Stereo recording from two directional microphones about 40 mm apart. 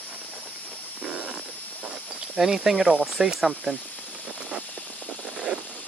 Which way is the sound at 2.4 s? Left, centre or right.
Centre.